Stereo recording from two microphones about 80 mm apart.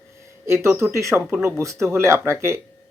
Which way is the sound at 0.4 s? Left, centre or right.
Right.